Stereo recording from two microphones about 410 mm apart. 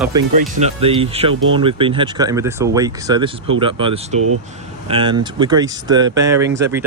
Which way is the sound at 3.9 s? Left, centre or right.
Right.